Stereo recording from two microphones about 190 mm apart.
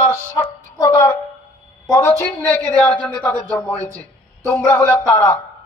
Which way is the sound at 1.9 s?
15° left (ahead or behind).